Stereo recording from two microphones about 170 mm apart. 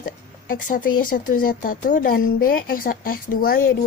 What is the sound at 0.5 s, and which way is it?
Speech, 55° left (ahead or behind).